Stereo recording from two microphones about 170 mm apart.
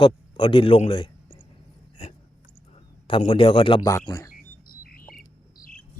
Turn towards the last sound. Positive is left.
turn(degrees=55)  # may be behind; listen again after turning